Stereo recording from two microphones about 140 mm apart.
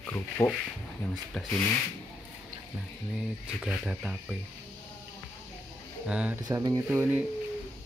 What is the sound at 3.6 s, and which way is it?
Speech, 5° right (ahead or behind).